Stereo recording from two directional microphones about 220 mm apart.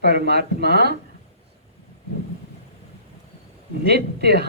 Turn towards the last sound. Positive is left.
turn(degrees=-50)  # may be behind; listen again after turning